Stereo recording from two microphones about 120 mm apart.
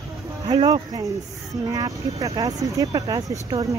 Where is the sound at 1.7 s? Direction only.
30° right (ahead or behind).